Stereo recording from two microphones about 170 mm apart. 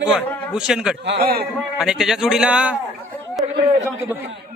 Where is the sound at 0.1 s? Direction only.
5° right (ahead or behind).